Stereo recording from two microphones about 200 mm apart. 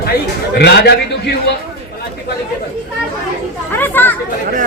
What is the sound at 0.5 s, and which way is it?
Speech, 55° left (ahead or behind).